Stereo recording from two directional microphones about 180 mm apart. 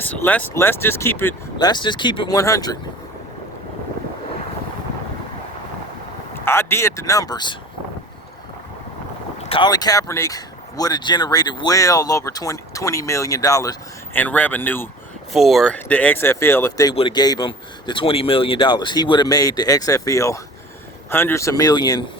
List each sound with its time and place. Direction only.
0.0 s speech: 10° left (ahead or behind)
1.5 s speech: 25° left (ahead or behind)
6.3 s speech: 15° left (ahead or behind)
9.4 s speech: 30° left (ahead or behind); by 14.8 s 10° left (ahead or behind)
15.3 s speech: centre (ahead or behind); by 16.9 s 15° left (ahead or behind)
16.9 s speech: 30° left (ahead or behind)